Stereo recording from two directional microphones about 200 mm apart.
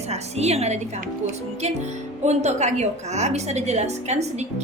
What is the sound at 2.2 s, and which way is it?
A woman's voice, 35° right (ahead or behind).